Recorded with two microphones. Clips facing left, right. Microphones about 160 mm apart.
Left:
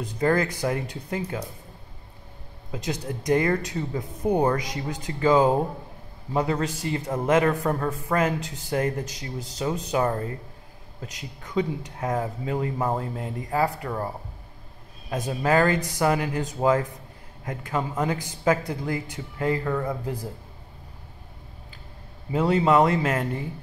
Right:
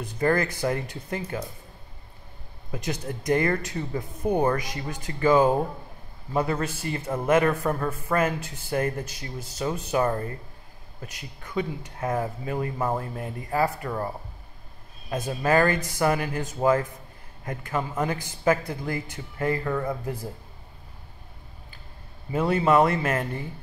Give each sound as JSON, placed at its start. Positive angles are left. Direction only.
{"t": 0.0, "sound": "a man's voice", "side_deg": 15}
{"t": 2.7, "sound": "a man's voice", "side_deg": 15}
{"t": 22.3, "sound": "a man's voice", "side_deg": 15}